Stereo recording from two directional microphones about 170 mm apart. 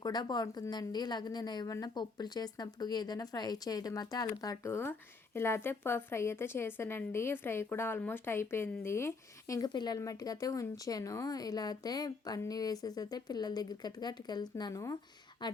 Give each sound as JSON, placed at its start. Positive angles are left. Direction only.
{"t": 0.0, "sound": "a woman's voice", "side_deg": 25}